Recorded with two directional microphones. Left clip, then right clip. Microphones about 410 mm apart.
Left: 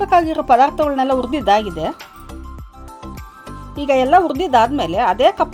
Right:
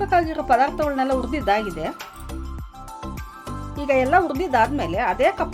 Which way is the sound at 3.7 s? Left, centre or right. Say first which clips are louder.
Left 5 dB; centre.